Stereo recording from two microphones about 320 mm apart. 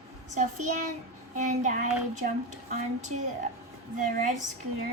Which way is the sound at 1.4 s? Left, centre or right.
Right.